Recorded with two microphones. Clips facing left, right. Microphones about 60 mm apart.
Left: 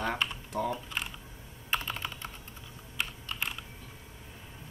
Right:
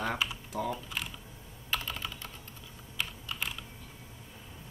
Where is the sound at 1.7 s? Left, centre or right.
Left.